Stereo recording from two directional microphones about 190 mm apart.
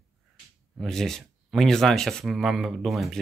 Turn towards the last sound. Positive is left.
turn(degrees=0)  # may be behind; listen again after turning